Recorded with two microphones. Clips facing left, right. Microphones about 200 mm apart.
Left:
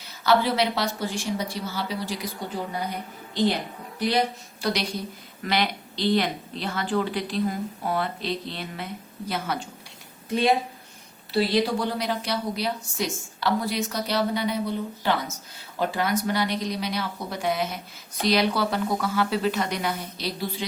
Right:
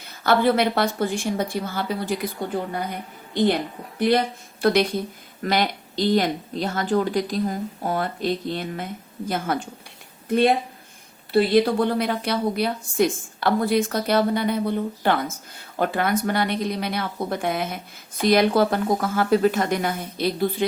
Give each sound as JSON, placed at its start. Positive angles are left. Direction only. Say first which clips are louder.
{"t": 0.0, "sound": "speech", "louder": "right 3 dB", "side_deg": -55}
{"t": 3.9, "sound": "a woman's voice", "louder": "right 4 dB", "side_deg": -55}